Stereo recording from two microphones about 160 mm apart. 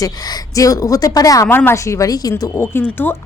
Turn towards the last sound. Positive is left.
turn(degrees=15)  # may be behind; listen again after turning